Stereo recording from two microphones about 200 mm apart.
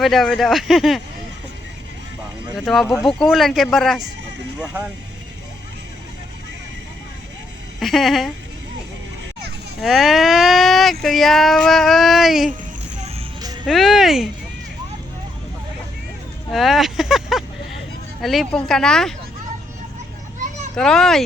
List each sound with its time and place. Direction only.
0.0 s speech: centre (ahead or behind)
2.6 s speech: centre (ahead or behind)
7.8 s speech: centre (ahead or behind)
9.8 s speech: centre (ahead or behind)
13.1 s music: 25° right (ahead or behind)
13.7 s speech: centre (ahead or behind)
16.5 s a sound: centre (ahead or behind)
18.2 s speech: centre (ahead or behind)
20.7 s speech: 5° left (ahead or behind)